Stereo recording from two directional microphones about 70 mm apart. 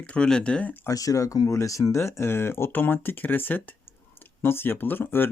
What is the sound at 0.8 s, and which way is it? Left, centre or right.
Speech, left.